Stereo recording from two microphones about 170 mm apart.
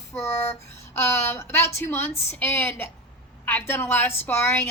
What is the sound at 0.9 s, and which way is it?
A woman's voice, 15° left (ahead or behind).